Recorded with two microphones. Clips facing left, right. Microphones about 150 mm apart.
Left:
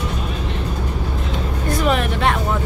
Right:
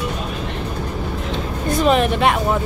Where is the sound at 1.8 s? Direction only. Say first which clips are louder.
Right 4 dB; 20° right (ahead or behind).